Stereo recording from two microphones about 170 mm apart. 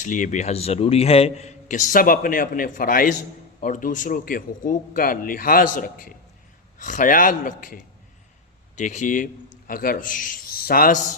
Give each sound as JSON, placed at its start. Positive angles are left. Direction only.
{"t": 0.0, "sound": "a man's voice", "side_deg": 50}
{"t": 8.8, "sound": "a man's voice", "side_deg": 45}